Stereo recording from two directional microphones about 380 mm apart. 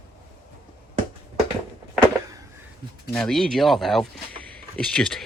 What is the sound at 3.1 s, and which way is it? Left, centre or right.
Speech, centre.